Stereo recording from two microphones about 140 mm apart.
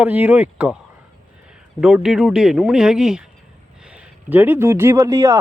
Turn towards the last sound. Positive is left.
turn(degrees=-20)  # may be behind; listen again after turning